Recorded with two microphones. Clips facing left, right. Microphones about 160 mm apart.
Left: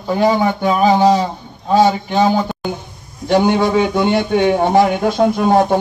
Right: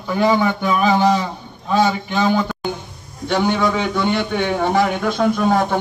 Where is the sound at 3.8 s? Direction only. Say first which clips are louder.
Left 5 dB; 20° left (ahead or behind).